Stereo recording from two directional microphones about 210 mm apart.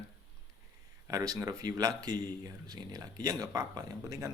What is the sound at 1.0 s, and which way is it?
Speech, 15° right (ahead or behind).